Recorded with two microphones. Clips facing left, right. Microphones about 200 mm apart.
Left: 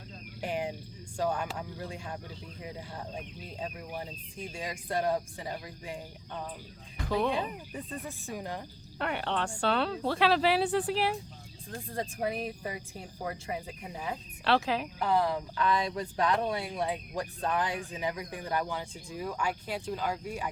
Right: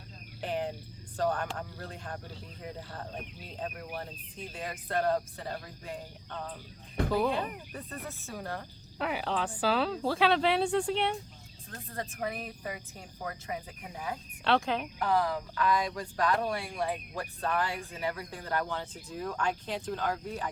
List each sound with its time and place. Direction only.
0.4 s speech: 10° left (ahead or behind)
7.1 s speech: centre (ahead or behind)
7.3 s speech: 15° left (ahead or behind)
9.0 s speech: centre (ahead or behind)
11.9 s speech: 15° left (ahead or behind)
13.2 s cricket: 20° left (ahead or behind)
14.4 s speech: centre (ahead or behind)
14.9 s speech: 25° left (ahead or behind)